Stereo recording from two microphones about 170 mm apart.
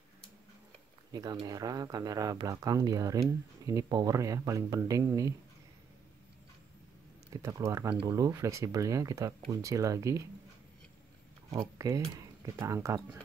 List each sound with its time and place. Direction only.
1.1 s speech: 25° right (ahead or behind)
7.4 s speech: 15° right (ahead or behind)
11.8 s speech: 20° right (ahead or behind)